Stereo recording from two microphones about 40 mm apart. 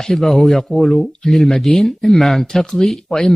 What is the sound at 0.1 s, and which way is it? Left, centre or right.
Speech, centre.